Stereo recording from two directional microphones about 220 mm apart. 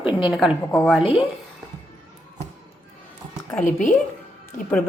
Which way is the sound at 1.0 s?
25° left (ahead or behind).